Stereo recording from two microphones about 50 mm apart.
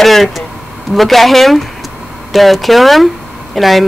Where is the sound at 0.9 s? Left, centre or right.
Centre.